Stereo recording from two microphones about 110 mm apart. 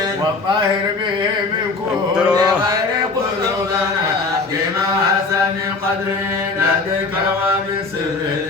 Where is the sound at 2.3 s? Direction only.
35° right (ahead or behind).